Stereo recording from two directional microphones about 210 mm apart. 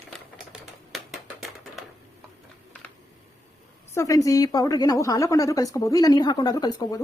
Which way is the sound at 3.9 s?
15° left (ahead or behind).